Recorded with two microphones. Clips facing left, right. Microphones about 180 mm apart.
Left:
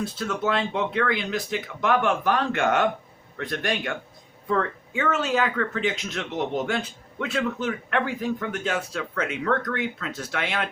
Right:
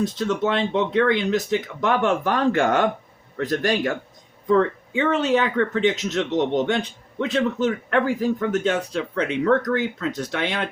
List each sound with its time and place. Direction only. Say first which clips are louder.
0.3 s a man's voice: right 1 dB; 30° right (ahead or behind)